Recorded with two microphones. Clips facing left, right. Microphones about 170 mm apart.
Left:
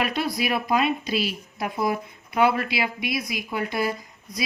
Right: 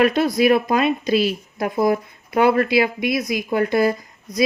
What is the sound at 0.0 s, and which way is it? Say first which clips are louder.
Speech: right 9 dB; 45° right (ahead or behind).